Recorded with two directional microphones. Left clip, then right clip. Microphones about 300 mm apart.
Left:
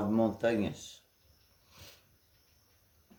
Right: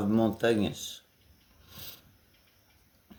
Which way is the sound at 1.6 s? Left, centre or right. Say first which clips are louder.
Right 7 dB; right.